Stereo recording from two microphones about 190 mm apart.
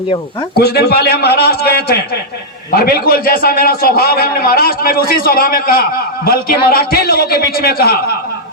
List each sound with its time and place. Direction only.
0.5 s a man's voice: 55° left (ahead or behind)